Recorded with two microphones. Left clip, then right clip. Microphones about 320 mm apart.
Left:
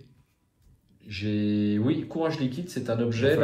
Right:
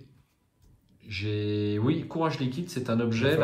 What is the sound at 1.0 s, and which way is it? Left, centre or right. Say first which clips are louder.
Speech: left 2 dB; centre.